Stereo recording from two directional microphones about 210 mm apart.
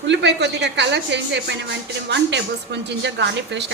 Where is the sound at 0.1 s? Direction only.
55° right (ahead or behind).